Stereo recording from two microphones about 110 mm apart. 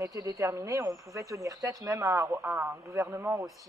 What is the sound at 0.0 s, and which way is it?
Speech, 30° right (ahead or behind).